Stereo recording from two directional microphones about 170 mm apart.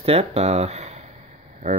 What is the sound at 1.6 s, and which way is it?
Hum, 45° right (ahead or behind).